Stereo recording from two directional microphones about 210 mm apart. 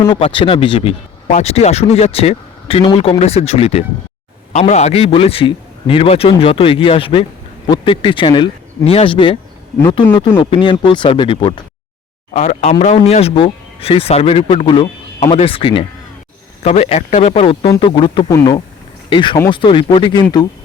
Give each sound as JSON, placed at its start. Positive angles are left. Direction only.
{"t": 0.0, "sound": "speech", "side_deg": 25}
{"t": 12.3, "sound": "speech", "side_deg": 35}